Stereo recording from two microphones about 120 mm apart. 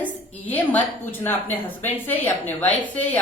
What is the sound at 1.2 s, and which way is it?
A woman's voice, 15° left (ahead or behind).